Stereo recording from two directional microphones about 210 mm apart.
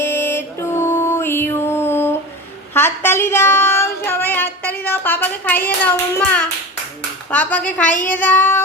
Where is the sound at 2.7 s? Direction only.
10° left (ahead or behind).